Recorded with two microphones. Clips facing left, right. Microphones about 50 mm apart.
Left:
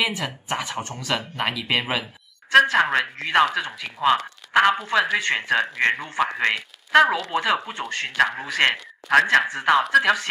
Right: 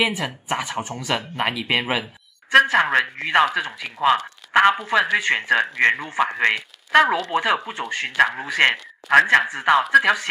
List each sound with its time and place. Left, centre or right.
0.2 s speech: centre
7.3 s speech: centre